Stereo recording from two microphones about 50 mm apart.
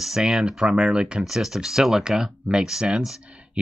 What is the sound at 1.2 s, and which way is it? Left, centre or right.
Speech, centre.